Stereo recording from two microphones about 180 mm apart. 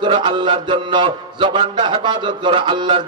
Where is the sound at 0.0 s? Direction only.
30° right (ahead or behind).